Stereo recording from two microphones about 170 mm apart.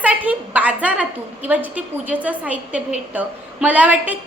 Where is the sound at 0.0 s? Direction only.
10° right (ahead or behind).